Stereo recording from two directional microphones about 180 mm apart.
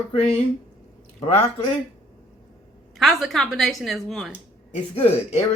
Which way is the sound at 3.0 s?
Centre (ahead or behind).